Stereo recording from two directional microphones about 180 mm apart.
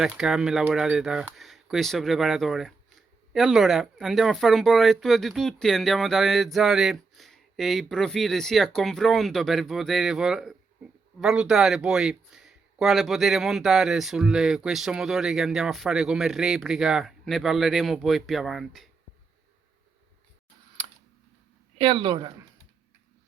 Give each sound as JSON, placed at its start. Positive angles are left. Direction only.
{"t": 0.0, "sound": "speech", "side_deg": -5}
{"t": 21.8, "sound": "speech", "side_deg": -25}